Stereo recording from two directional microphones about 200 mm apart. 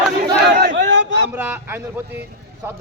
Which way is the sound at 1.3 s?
10° right (ahead or behind).